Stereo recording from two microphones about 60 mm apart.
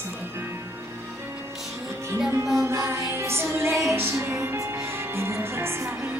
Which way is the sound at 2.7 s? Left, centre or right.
Right.